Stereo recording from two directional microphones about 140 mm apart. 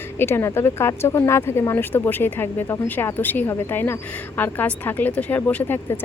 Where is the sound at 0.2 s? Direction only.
15° left (ahead or behind).